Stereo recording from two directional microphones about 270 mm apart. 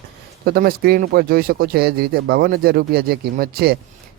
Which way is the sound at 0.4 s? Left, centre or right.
Right.